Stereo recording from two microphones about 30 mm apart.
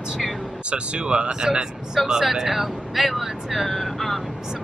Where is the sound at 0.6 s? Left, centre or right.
Right.